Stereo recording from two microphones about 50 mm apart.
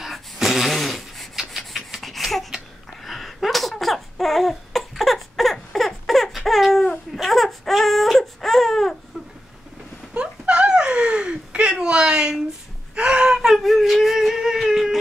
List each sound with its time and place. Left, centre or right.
0.0 s a sound: centre
1.3 s rub: centre
3.0 s laughter: centre
7.2 s baby cry: centre
10.1 s a sound: centre
12.9 s whimper: centre